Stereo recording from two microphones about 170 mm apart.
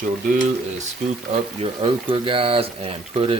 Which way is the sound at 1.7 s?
30° right (ahead or behind).